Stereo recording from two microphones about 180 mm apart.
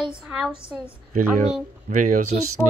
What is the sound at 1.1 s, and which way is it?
Speech, 45° right (ahead or behind).